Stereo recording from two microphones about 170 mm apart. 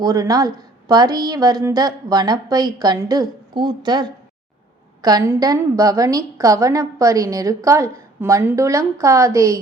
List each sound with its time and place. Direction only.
0.0 s a woman's voice: 20° right (ahead or behind)